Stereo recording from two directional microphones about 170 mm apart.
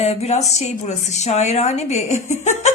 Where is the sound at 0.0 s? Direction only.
35° left (ahead or behind).